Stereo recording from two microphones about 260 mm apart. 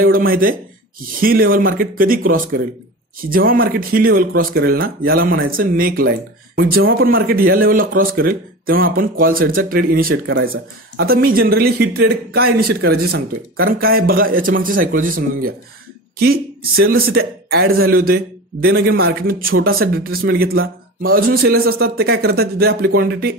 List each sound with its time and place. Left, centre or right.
0.0 s speech: right
6.8 s speech: right
7.2 s speech: right